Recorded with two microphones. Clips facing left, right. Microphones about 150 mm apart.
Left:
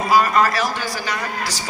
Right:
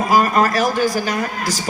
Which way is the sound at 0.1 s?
45° right (ahead or behind).